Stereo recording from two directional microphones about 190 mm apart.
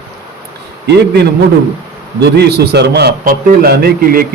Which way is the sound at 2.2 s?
60° right (ahead or behind).